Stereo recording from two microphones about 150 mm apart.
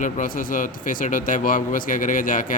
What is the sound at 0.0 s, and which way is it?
A man's voice, 60° left (ahead or behind).